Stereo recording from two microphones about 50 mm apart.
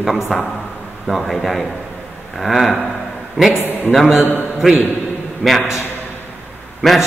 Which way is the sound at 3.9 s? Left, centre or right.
Centre.